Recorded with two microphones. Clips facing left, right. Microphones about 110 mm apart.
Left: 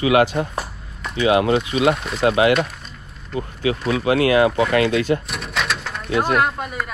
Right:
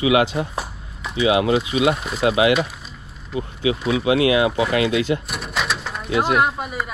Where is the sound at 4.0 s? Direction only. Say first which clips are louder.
Left 2 dB; 40° left (ahead or behind).